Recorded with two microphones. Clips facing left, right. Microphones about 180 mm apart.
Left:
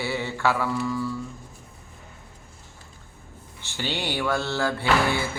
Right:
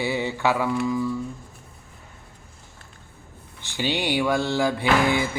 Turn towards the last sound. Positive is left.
turn(degrees=-15)  # may be behind; listen again after turning